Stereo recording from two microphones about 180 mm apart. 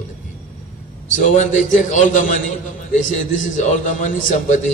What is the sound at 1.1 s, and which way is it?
A man's voice, 45° left (ahead or behind).